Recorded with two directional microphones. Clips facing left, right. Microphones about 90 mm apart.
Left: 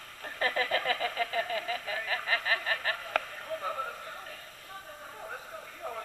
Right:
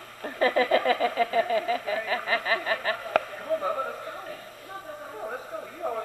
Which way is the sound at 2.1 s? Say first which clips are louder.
Right 3 dB; 20° right (ahead or behind).